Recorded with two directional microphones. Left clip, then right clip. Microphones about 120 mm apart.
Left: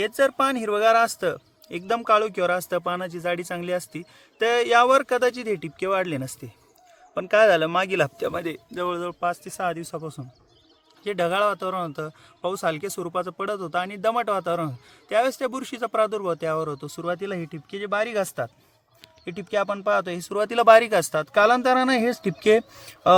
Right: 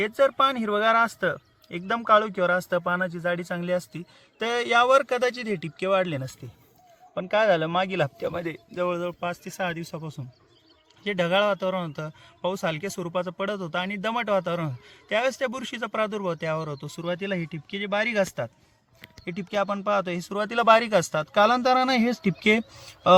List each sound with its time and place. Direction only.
0.0 s a man's voice: 90° left
7.1 s speech: 90° left; by 23.1 s 50° left (ahead or behind)